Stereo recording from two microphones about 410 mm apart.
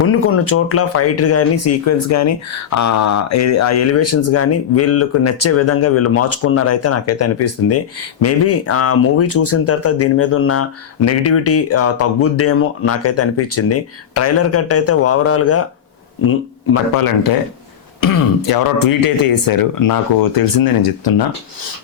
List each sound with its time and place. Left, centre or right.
0.1 s speech: left
18.0 s speech: left